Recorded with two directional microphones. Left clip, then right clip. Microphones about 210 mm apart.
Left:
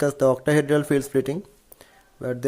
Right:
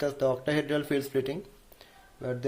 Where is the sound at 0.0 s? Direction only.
55° left (ahead or behind).